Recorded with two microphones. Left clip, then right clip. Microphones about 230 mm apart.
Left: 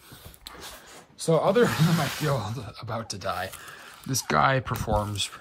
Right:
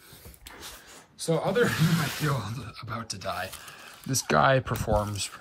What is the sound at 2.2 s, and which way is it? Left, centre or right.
Speech, centre.